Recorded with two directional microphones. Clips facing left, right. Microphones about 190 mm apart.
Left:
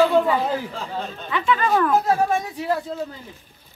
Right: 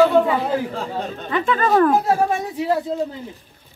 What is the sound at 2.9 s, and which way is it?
Speech, 20° right (ahead or behind).